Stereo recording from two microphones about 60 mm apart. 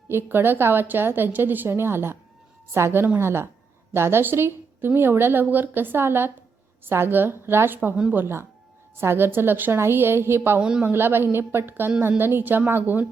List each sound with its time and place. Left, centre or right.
0.1 s a woman's voice: right
9.0 s a woman's voice: right
10.6 s a man's voice: centre
10.8 s a woman's voice: right